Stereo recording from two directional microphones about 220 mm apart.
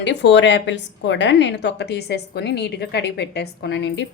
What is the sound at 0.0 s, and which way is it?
A woman's voice, 55° left (ahead or behind).